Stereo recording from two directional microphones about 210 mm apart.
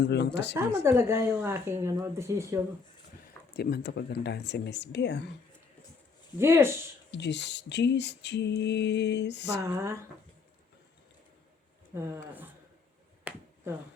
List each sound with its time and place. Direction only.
0.1 s speech: 55° left (ahead or behind)
0.5 s speech: 10° right (ahead or behind)
3.5 s speech: 50° left (ahead or behind)
6.4 s speech: 10° right (ahead or behind)
7.1 s mantra: 55° left (ahead or behind)
9.6 s speech: 15° right (ahead or behind)
12.1 s speech: 10° right (ahead or behind)
13.3 s finger snapping: 10° right (ahead or behind)